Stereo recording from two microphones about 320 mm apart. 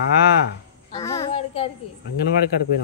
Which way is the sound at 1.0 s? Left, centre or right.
Centre.